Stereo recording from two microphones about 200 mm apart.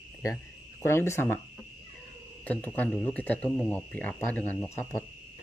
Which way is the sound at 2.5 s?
10° left (ahead or behind).